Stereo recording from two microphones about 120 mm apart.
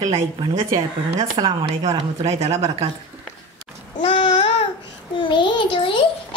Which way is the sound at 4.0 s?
40° left (ahead or behind).